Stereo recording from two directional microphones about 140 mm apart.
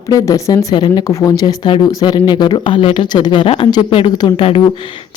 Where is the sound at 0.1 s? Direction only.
25° left (ahead or behind).